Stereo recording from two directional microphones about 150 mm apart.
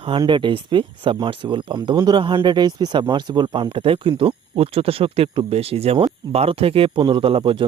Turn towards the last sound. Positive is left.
turn(degrees=-35)  # may be behind; listen again after turning